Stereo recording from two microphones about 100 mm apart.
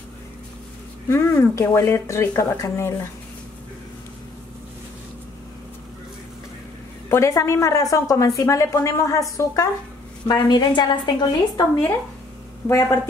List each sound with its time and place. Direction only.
1.0 s speech: 25° left (ahead or behind)
7.1 s a woman's voice: 30° left (ahead or behind); by 11.6 s 50° left (ahead or behind)
12.6 s speech: 30° left (ahead or behind)